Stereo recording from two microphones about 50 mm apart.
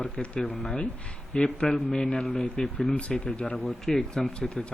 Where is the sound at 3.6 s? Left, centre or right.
Centre.